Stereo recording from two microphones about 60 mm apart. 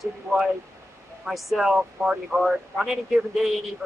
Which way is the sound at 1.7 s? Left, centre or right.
Centre.